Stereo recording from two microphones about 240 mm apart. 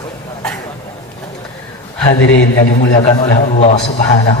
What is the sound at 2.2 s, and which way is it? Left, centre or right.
Speech, left.